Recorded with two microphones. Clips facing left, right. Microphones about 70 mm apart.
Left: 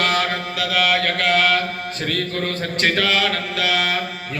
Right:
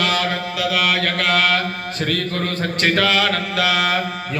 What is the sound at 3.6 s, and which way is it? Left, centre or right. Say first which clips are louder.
Mantra: right 2 dB; right.